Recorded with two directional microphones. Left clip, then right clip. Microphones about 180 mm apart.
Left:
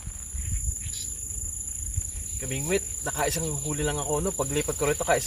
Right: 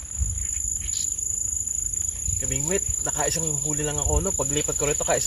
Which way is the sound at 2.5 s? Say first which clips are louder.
Even; 20° left (ahead or behind).